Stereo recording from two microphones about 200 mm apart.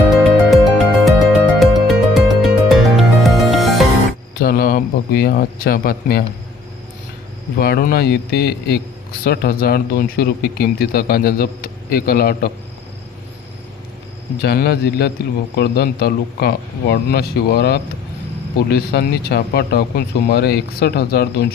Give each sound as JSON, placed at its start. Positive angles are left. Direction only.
{"t": 0.1, "sound": "music", "side_deg": 0}
{"t": 4.4, "sound": "a sound", "side_deg": 50}
{"t": 7.6, "sound": "speech", "side_deg": 50}
{"t": 14.4, "sound": "speech", "side_deg": 50}